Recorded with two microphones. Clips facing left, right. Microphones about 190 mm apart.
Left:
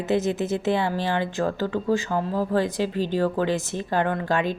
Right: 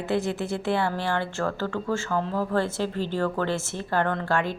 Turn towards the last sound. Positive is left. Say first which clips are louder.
# left 2 dB
turn(degrees=20)  # may be behind; listen again after turning